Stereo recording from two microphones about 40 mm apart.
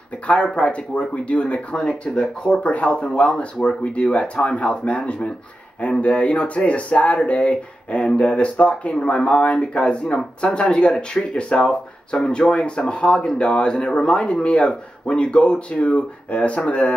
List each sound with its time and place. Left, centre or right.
0.3 s speech: left
2.6 s speech: left